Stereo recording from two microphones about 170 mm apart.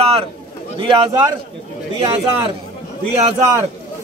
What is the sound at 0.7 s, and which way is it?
Speech, 25° right (ahead or behind).